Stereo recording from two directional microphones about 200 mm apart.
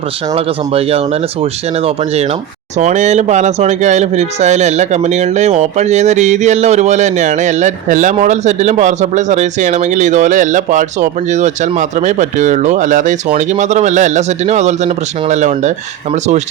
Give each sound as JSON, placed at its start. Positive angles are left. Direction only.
{"t": 0.3, "sound": "speech", "side_deg": -30}